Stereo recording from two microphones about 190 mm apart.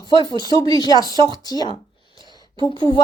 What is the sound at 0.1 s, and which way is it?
Speech, 20° left (ahead or behind).